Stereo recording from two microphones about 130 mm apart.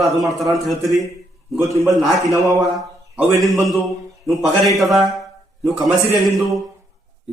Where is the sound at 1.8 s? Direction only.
Centre (ahead or behind).